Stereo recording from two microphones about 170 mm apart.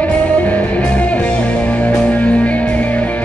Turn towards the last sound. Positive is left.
turn(degrees=10)  # may be behind; listen again after turning